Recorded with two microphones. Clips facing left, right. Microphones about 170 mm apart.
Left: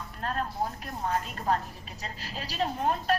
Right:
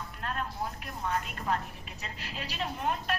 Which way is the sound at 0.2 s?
35° left (ahead or behind).